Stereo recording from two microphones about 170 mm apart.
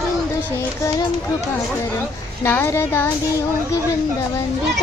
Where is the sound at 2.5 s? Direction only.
15° left (ahead or behind).